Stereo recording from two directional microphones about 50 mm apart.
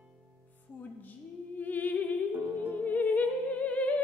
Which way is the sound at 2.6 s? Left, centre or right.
Left.